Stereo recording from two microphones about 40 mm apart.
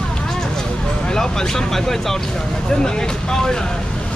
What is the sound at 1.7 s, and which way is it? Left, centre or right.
Speech, centre.